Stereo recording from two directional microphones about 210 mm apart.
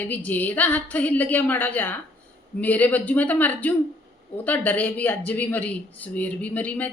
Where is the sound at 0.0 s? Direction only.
10° left (ahead or behind).